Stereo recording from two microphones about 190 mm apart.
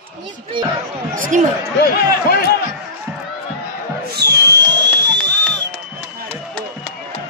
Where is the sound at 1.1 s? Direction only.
45° right (ahead or behind).